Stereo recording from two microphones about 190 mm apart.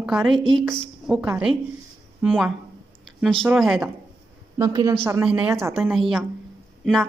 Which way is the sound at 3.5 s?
5° right (ahead or behind).